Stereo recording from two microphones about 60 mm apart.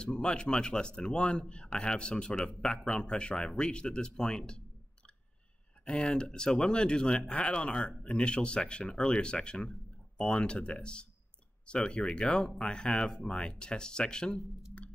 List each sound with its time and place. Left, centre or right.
0.0 s speech: centre